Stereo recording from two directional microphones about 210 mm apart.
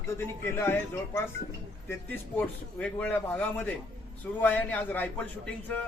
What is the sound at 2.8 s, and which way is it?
A man's voice, 5° left (ahead or behind).